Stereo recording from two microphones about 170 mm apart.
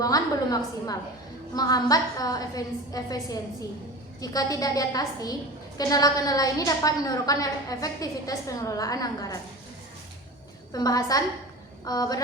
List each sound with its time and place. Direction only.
0.0 s a woman's voice: 20° left (ahead or behind)
10.7 s a woman's voice: 20° left (ahead or behind)